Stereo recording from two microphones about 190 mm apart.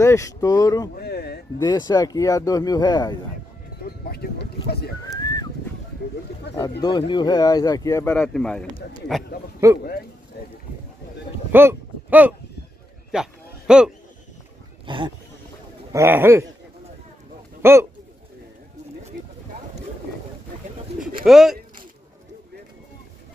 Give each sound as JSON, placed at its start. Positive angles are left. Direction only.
{"t": 0.0, "sound": "speech", "side_deg": 15}
{"t": 0.9, "sound": "a sound", "side_deg": 55}
{"t": 1.6, "sound": "speech", "side_deg": 20}
{"t": 3.8, "sound": "music", "side_deg": 55}
{"t": 5.1, "sound": "a sound", "side_deg": 20}
{"t": 6.5, "sound": "speech", "side_deg": 60}
{"t": 6.8, "sound": "speech", "side_deg": 25}
{"t": 11.5, "sound": "speech", "side_deg": -10}
{"t": 13.1, "sound": "a sound", "side_deg": -5}
{"t": 14.9, "sound": "speech", "side_deg": -25}
{"t": 15.9, "sound": "speech", "side_deg": -15}
{"t": 17.6, "sound": "speech", "side_deg": -15}
{"t": 21.3, "sound": "speech", "side_deg": 0}